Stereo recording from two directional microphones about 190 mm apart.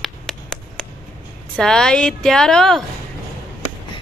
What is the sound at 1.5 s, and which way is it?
A woman's voice, 5° left (ahead or behind).